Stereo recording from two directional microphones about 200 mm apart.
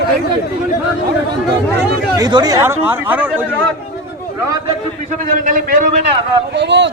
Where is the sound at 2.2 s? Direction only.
20° right (ahead or behind).